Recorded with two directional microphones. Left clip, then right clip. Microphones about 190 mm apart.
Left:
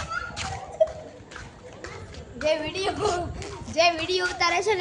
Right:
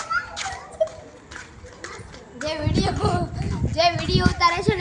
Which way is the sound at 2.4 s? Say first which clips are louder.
Even; 15° left (ahead or behind).